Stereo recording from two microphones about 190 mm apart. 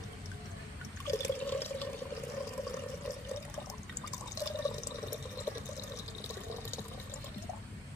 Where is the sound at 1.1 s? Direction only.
15° left (ahead or behind).